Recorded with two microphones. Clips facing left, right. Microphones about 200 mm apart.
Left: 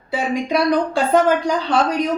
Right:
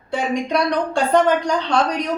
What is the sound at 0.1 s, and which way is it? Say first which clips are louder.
Speech: left 1 dB; 5° left (ahead or behind).